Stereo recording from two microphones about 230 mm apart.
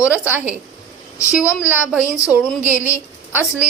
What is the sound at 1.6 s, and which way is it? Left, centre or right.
Speech, centre.